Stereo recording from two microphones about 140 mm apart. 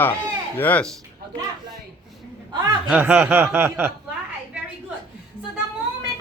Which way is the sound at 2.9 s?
10° right (ahead or behind).